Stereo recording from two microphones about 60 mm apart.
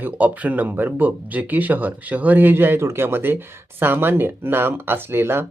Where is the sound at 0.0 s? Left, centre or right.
Right.